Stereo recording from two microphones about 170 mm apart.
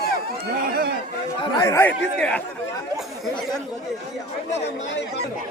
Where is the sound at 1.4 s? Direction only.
20° left (ahead or behind).